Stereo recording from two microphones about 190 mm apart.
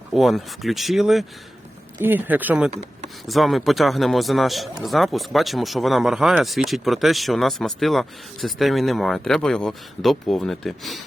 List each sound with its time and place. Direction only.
0.1 s a man's voice: centre (ahead or behind)